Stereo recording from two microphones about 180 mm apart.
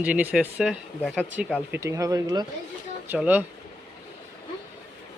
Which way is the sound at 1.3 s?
10° right (ahead or behind).